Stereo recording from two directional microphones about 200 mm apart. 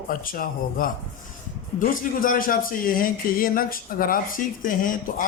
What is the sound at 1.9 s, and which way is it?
Speech, 45° left (ahead or behind).